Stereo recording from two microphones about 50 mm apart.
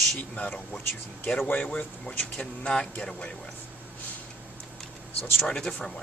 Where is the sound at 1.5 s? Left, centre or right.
Left.